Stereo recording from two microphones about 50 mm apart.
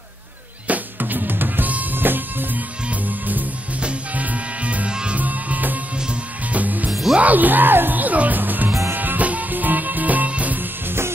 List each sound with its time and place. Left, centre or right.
0.7 s drum: right
2.9 s music: right
5.2 s music: right
6.9 s music: centre
7.2 s music: right